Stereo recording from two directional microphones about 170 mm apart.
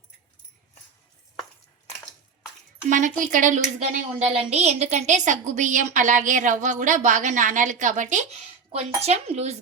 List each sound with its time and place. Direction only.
2.9 s a woman's voice: 50° right (ahead or behind)
4.1 s a woman's voice: 35° right (ahead or behind)